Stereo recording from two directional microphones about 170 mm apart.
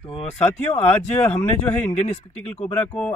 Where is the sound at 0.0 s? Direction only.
35° left (ahead or behind).